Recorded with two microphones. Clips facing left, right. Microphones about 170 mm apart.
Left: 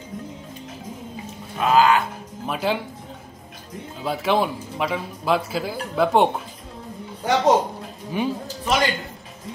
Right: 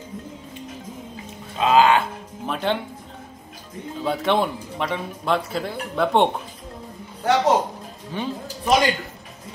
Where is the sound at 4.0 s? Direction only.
5° left (ahead or behind).